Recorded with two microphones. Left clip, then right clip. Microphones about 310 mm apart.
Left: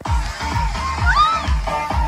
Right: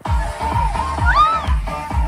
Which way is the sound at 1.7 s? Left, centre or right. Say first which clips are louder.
Left 6 dB; left.